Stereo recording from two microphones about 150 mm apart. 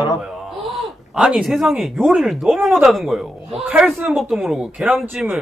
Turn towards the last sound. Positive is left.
turn(degrees=-5)  # may be behind; listen again after turning